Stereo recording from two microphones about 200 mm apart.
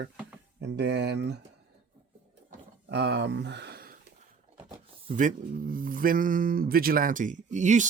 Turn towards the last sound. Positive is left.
turn(degrees=-35)  # may be behind; listen again after turning